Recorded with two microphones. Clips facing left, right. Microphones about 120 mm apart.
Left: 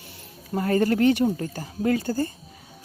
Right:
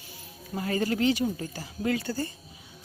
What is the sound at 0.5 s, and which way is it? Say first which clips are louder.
Speech: left 6 dB; 50° left (ahead or behind).